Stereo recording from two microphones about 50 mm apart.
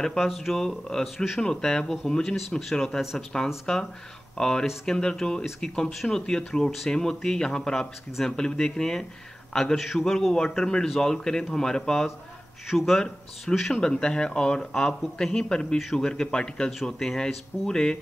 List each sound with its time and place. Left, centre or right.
0.0 s speech: centre
1.4 s a man's voice: centre
9.8 s speech: centre